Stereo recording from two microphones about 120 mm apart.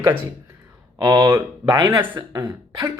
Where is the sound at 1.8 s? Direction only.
20° right (ahead or behind).